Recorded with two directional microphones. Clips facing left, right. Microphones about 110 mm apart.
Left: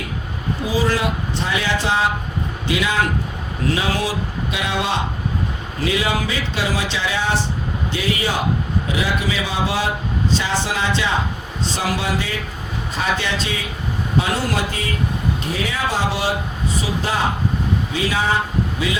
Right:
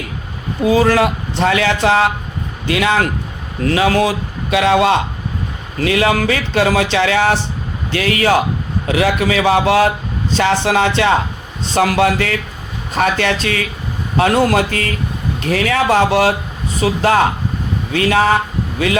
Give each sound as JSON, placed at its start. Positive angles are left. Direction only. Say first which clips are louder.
{"t": 0.6, "sound": "speech", "louder": "right 8 dB", "side_deg": -60}
{"t": 4.5, "sound": "speech", "louder": "right 11 dB", "side_deg": -75}